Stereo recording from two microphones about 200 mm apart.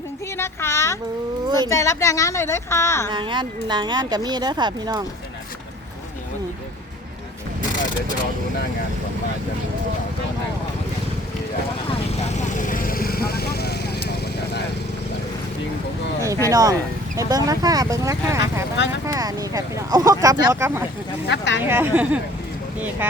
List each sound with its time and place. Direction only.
0.3 s a woman's voice: 10° left (ahead or behind)
1.5 s speech: 20° right (ahead or behind)
1.7 s a woman's voice: 15° left (ahead or behind)
3.1 s speech: 25° right (ahead or behind)
12.2 s vehicle: 40° left (ahead or behind)
16.5 s speech: 15° right (ahead or behind)
21.2 s speech: 60° left (ahead or behind)
21.6 s speech: 10° right (ahead or behind)